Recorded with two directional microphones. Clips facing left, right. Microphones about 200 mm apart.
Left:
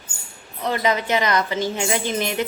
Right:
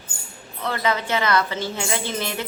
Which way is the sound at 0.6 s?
15° left (ahead or behind).